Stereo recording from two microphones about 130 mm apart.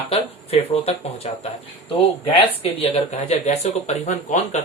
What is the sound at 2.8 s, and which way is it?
Speech, 50° left (ahead or behind).